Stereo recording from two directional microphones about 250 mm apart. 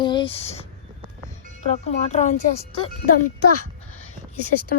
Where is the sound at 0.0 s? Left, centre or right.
Centre.